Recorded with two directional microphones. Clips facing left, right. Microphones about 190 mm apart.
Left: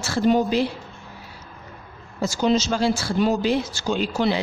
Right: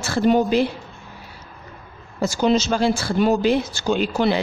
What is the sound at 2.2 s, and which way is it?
Speech, 60° right (ahead or behind).